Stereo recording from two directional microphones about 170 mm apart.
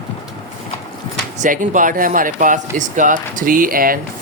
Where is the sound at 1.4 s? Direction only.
50° right (ahead or behind).